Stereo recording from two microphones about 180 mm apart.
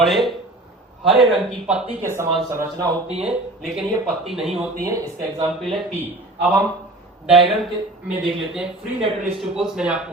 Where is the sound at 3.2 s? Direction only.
Centre (ahead or behind).